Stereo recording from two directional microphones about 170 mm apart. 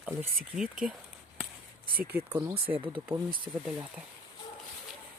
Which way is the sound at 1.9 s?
60° right (ahead or behind).